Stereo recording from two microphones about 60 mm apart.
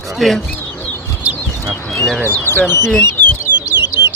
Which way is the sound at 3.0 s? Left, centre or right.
Left.